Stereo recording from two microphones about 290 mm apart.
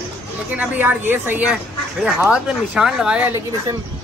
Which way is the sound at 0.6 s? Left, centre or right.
Centre.